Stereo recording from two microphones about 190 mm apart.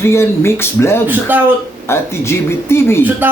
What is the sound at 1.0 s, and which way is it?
Speech, 10° right (ahead or behind).